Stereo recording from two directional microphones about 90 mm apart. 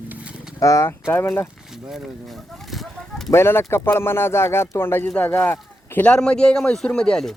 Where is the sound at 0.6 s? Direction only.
35° left (ahead or behind).